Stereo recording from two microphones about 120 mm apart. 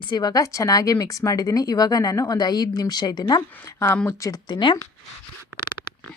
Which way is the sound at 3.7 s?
20° left (ahead or behind).